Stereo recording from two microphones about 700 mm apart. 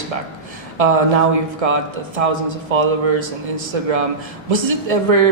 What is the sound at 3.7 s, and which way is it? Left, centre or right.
A man's voice, right.